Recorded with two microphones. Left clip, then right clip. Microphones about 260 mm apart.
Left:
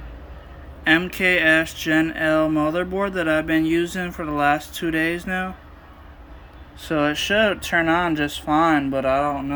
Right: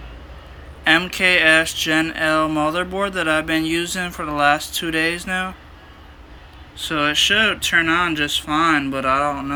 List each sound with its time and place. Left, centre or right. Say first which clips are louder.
0.9 s speech: right 3 dB; centre
6.7 s speech: right 3 dB; centre